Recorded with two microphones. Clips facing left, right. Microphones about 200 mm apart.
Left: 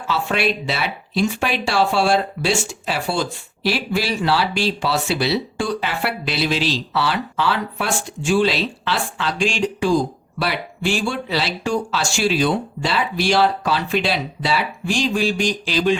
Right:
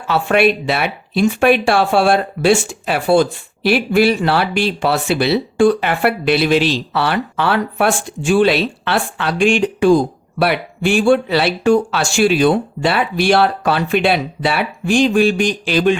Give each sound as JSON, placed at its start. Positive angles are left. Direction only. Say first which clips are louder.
{"t": 0.1, "sound": "speech", "louder": "right 7 dB", "side_deg": -60}